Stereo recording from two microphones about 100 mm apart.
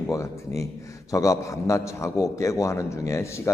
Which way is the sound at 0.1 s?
30° left (ahead or behind).